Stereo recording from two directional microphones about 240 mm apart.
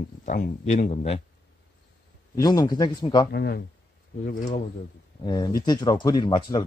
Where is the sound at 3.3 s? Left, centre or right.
Left.